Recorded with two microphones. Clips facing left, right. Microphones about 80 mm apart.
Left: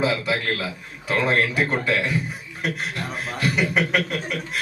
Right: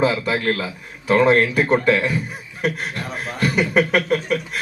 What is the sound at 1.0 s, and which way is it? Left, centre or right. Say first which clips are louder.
A man's voice: right 6 dB; right.